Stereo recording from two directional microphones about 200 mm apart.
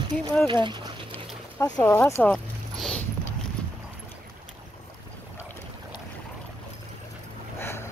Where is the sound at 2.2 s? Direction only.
5° left (ahead or behind).